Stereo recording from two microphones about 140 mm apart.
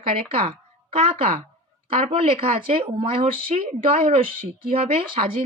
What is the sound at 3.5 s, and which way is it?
A woman's voice, 55° right (ahead or behind).